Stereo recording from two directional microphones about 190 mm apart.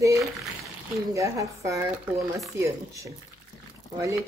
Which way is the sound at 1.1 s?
15° right (ahead or behind).